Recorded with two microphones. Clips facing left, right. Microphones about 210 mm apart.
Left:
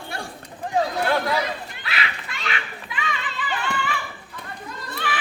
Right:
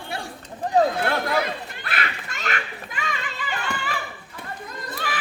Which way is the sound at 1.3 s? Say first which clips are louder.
Right 1 dB; 50° right (ahead or behind).